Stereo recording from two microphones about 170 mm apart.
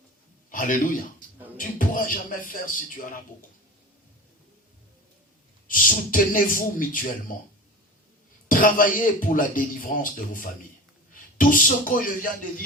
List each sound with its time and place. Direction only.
0.5 s a man's voice: 50° left (ahead or behind)
5.6 s speech: 55° left (ahead or behind)
8.4 s speech: 55° left (ahead or behind)